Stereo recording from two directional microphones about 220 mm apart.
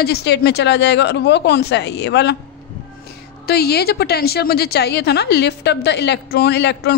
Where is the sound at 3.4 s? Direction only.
45° left (ahead or behind).